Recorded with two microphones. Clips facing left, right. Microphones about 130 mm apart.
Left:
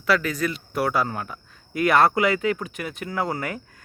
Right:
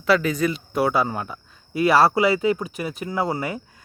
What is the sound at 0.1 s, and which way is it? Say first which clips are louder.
Speech: right 3 dB; 25° right (ahead or behind).